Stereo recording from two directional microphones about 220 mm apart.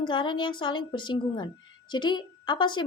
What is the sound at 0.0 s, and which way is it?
A woman's voice, 20° left (ahead or behind).